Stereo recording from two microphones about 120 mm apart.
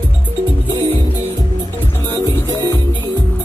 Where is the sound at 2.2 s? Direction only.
20° left (ahead or behind).